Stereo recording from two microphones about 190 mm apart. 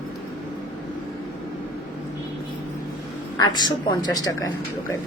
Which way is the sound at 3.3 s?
20° left (ahead or behind).